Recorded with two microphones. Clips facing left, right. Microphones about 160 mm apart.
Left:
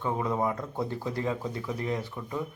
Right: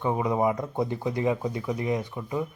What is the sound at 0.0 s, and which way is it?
Speech, 15° right (ahead or behind).